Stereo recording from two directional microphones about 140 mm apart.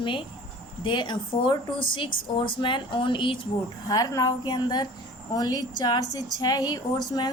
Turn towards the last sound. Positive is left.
turn(degrees=30)  # may be behind; listen again after turning